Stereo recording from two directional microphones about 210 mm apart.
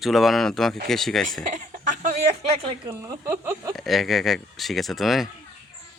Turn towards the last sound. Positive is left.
turn(degrees=0)  # may be behind; listen again after turning